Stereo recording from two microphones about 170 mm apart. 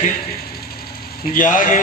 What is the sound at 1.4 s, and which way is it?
Mantra, 50° left (ahead or behind).